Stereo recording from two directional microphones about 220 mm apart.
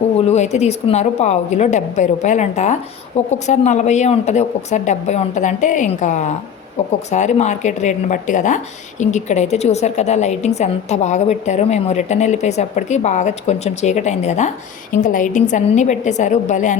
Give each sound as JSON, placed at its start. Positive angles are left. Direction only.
{"t": 0.3, "sound": "speech", "side_deg": 30}